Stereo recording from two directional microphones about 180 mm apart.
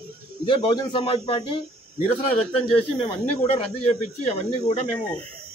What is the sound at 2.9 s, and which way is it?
Speech, 30° left (ahead or behind).